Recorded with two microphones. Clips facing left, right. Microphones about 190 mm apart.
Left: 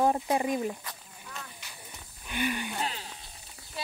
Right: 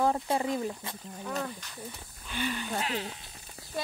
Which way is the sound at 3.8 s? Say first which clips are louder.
Right 4 dB; 50° right (ahead or behind).